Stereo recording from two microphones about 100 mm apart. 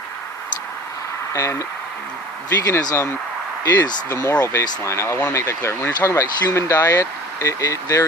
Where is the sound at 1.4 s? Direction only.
30° left (ahead or behind).